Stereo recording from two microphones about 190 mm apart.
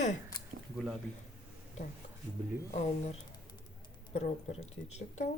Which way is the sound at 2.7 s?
35° left (ahead or behind).